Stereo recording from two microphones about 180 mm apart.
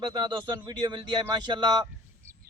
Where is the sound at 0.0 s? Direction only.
25° right (ahead or behind).